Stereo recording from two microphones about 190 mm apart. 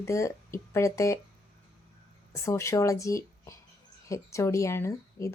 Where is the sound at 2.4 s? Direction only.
15° left (ahead or behind).